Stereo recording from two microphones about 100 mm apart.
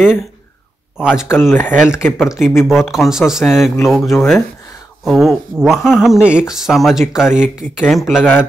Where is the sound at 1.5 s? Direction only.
20° left (ahead or behind).